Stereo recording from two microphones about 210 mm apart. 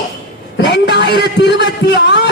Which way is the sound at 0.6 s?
55° left (ahead or behind).